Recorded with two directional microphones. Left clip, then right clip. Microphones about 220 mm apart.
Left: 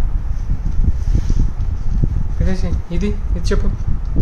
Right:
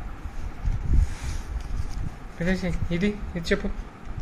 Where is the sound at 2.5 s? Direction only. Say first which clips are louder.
Even; 10° left (ahead or behind).